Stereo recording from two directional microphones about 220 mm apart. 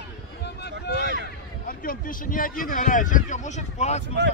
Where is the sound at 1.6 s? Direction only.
40° left (ahead or behind).